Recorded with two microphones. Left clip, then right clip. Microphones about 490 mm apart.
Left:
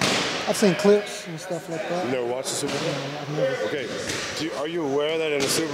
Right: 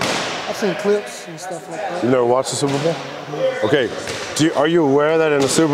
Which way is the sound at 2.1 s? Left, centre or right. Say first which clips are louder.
Right 10 dB; right.